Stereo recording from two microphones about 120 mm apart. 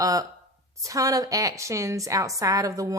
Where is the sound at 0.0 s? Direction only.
30° right (ahead or behind).